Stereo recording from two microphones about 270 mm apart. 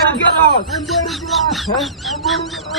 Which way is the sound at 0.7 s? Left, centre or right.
Centre.